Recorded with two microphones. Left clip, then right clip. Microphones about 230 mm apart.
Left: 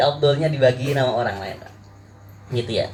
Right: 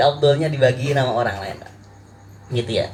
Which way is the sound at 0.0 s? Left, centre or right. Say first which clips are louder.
Right 2 dB; right.